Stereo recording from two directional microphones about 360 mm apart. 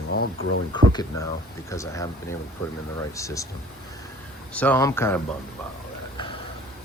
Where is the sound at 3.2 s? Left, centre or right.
Centre.